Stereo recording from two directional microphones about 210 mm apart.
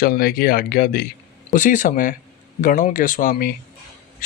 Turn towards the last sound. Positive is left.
turn(degrees=40)  # may be behind; listen again after turning